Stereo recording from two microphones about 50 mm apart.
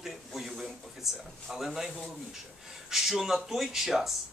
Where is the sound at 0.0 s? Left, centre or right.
Centre.